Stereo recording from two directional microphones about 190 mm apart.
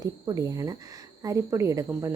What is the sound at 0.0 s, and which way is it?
A woman's voice, 20° right (ahead or behind).